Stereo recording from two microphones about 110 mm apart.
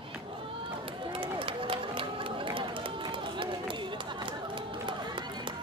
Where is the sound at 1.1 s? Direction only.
50° right (ahead or behind).